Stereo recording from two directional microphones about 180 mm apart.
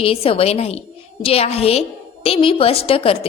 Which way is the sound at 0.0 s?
30° left (ahead or behind).